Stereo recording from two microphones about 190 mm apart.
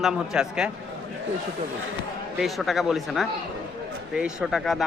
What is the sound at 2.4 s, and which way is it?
Speech, centre (ahead or behind).